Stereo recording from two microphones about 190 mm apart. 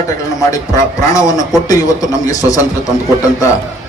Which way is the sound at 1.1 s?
20° left (ahead or behind).